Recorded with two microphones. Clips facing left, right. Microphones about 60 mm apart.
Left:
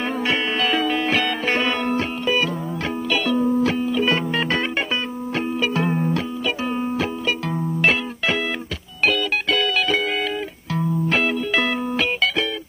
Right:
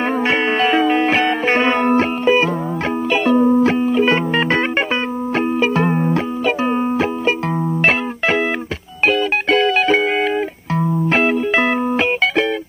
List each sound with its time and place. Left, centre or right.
0.3 s music: right